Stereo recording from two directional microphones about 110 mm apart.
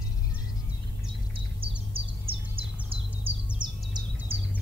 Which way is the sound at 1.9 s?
55° right (ahead or behind).